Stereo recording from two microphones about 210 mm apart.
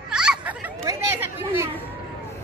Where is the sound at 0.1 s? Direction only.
5° right (ahead or behind).